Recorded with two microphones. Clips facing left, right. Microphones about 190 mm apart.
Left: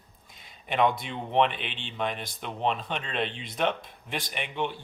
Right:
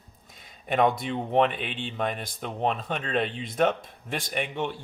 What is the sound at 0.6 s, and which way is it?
Speech, 45° right (ahead or behind).